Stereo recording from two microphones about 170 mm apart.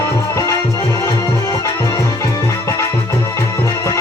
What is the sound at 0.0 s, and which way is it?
Music, 15° left (ahead or behind).